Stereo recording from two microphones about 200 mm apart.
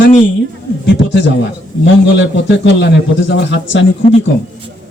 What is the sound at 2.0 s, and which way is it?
A man's voice, 60° left (ahead or behind).